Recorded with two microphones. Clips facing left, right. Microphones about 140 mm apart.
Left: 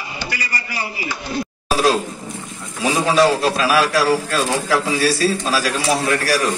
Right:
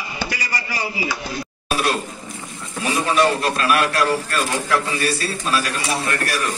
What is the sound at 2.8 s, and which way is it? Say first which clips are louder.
A man's voice: left 3 dB; 90° left.